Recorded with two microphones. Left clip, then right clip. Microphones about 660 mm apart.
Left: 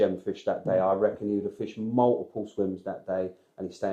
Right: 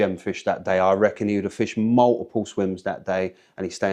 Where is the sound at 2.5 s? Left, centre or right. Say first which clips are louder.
Right 2 dB; right.